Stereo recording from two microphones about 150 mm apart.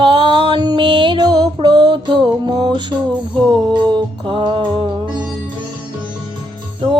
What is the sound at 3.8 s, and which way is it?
Music, 35° right (ahead or behind).